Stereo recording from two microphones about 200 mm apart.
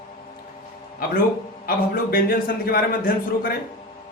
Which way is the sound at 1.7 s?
45° left (ahead or behind).